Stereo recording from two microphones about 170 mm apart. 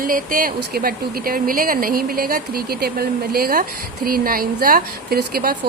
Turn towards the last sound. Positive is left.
turn(degrees=-65)  # may be behind; listen again after turning